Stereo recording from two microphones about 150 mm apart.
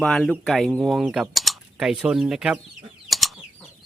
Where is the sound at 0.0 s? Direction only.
5° left (ahead or behind).